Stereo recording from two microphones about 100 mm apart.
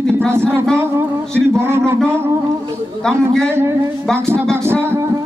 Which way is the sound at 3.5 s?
25° right (ahead or behind).